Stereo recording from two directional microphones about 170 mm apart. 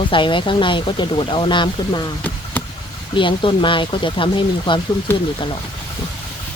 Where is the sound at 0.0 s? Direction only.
30° left (ahead or behind).